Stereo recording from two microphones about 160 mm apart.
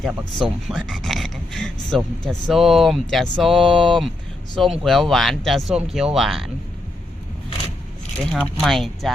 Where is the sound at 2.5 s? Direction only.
Centre (ahead or behind).